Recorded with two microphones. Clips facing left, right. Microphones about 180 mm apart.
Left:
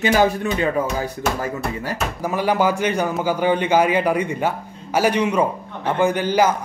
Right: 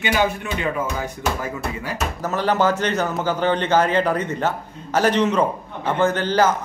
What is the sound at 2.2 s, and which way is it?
A man's voice, 10° left (ahead or behind).